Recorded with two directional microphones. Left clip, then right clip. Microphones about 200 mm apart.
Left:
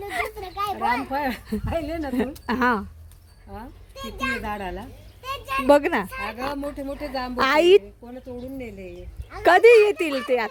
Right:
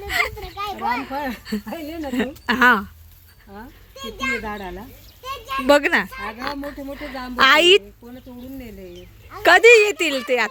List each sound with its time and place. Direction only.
0.1 s a sound: 5° left (ahead or behind)
0.4 s a sound: 30° left (ahead or behind)
1.1 s speech: 20° left (ahead or behind)
1.5 s speech: 5° left (ahead or behind)
3.9 s a child's voice: 35° left (ahead or behind)
4.4 s speech: 20° left (ahead or behind)
5.6 s speech: 5° left (ahead or behind)
6.1 s a child's voice: 35° left (ahead or behind)
6.4 s speech: 10° left (ahead or behind)
9.4 s speech: 5° left (ahead or behind)